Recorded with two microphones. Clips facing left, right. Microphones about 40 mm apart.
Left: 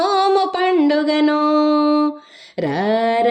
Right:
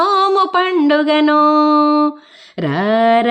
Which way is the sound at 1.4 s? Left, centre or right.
Centre.